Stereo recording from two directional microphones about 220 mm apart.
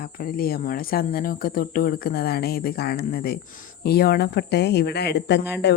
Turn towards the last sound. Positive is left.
turn(degrees=50)  # may be behind; listen again after turning